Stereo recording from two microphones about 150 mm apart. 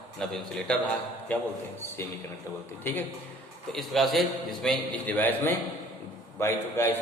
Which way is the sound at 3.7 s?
Centre (ahead or behind).